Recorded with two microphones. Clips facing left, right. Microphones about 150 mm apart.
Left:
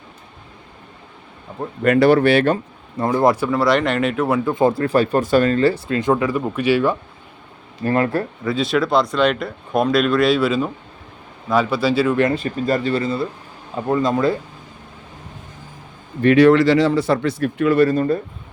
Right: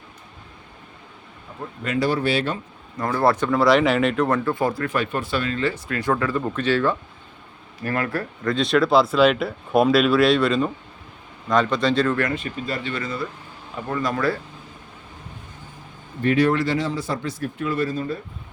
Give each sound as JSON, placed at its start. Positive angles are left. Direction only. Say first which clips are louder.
{"t": 1.8, "sound": "speech", "louder": "left 9 dB", "side_deg": 60}
{"t": 3.0, "sound": "speech", "louder": "left 4 dB", "side_deg": 20}
{"t": 4.5, "sound": "speech", "louder": "left 7 dB", "side_deg": 25}
{"t": 5.9, "sound": "speech", "louder": "left 4 dB", "side_deg": 20}
{"t": 7.8, "sound": "speech", "louder": "left 6 dB", "side_deg": 25}
{"t": 8.4, "sound": "speech", "louder": "right 1 dB", "side_deg": 5}
{"t": 12.3, "sound": "speech", "louder": "left 7 dB", "side_deg": 40}
{"t": 16.2, "sound": "a man's voice", "louder": "left 8 dB", "side_deg": 85}